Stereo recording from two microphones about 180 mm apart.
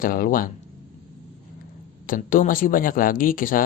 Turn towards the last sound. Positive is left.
turn(degrees=50)  # may be behind; listen again after turning